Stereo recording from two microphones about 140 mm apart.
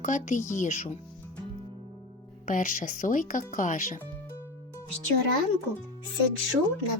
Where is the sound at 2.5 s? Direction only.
70° left (ahead or behind).